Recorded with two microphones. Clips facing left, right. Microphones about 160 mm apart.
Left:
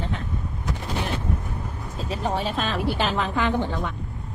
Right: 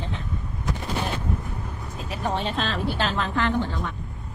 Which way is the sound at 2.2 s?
5° left (ahead or behind).